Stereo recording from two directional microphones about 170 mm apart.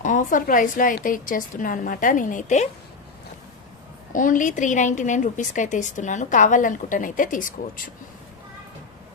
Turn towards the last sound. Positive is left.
turn(degrees=50)  # may be behind; listen again after turning